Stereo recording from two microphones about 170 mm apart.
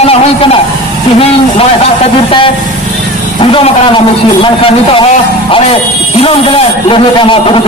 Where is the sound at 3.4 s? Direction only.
30° left (ahead or behind).